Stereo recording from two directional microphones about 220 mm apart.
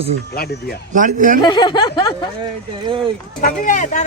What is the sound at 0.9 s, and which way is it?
Speech, 35° right (ahead or behind).